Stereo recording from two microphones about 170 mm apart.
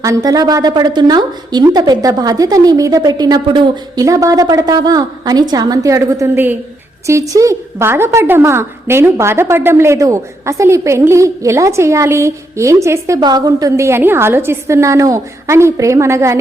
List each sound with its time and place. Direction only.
0.0 s a woman's voice: 20° right (ahead or behind)